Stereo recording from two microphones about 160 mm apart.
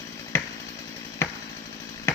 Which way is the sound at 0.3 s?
15° left (ahead or behind).